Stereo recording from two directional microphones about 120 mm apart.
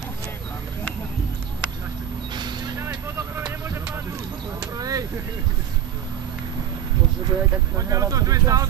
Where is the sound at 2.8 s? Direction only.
25° right (ahead or behind).